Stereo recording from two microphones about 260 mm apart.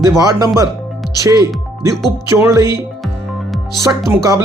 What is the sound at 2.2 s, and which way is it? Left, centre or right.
Speech, centre.